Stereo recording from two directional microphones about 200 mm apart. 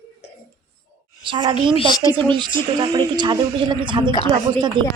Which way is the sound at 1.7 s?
25° left (ahead or behind).